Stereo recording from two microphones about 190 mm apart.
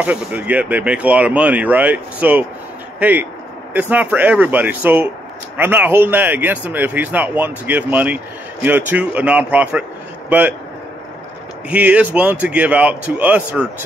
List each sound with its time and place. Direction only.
0.0 s speech: 10° right (ahead or behind)
11.7 s speech: 5° right (ahead or behind)